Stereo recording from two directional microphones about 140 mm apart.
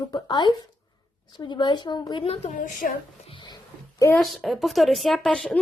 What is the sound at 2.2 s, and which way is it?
Speech, 45° left (ahead or behind).